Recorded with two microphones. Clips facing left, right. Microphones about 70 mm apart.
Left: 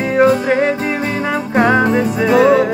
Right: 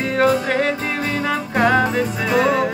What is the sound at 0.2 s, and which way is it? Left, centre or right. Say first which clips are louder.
Music: left 5 dB; centre.